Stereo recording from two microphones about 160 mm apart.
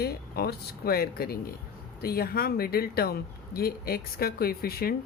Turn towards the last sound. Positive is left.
turn(degrees=70)  # may be behind; listen again after turning